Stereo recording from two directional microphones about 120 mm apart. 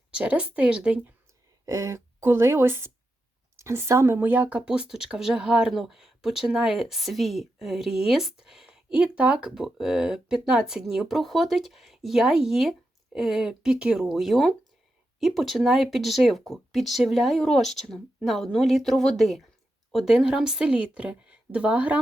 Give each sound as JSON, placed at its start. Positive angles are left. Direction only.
{"t": 0.1, "sound": "a woman's voice", "side_deg": -10}
{"t": 1.6, "sound": "a woman's voice", "side_deg": -25}